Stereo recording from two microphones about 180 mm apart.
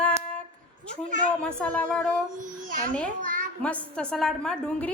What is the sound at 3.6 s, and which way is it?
Speech, 5° left (ahead or behind).